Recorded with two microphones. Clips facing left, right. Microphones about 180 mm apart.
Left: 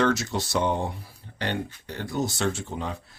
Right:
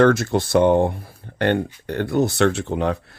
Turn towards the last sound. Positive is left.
turn(degrees=-65)  # may be behind; listen again after turning